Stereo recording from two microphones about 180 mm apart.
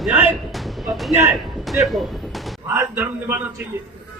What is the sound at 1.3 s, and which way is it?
Music, centre (ahead or behind).